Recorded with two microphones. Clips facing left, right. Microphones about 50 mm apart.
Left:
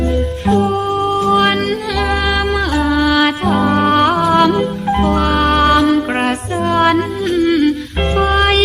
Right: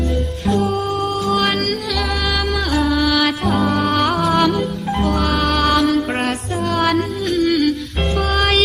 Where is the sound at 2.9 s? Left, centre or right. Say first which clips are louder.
Left 4 dB; left.